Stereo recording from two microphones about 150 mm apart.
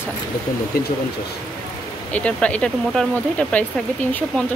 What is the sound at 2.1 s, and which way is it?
Speech, 10° left (ahead or behind).